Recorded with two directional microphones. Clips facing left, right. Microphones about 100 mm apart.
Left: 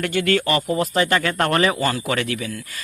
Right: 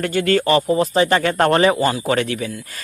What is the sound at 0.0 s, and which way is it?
Speech, 35° right (ahead or behind).